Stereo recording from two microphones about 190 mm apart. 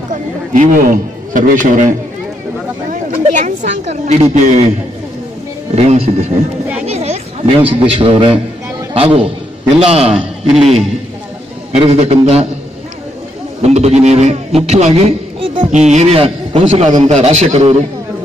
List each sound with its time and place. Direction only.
0.1 s a man's voice: 45° right (ahead or behind)
5.8 s a man's voice: 35° right (ahead or behind)
11.7 s a man's voice: 30° right (ahead or behind)
13.6 s a man's voice: 35° right (ahead or behind)